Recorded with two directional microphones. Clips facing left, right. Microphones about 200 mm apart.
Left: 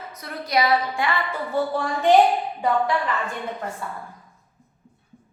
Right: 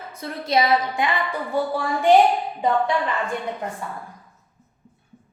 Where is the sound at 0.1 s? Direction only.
25° right (ahead or behind); by 2.1 s 10° right (ahead or behind).